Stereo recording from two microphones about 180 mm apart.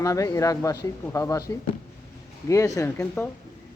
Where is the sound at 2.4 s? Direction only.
15° left (ahead or behind).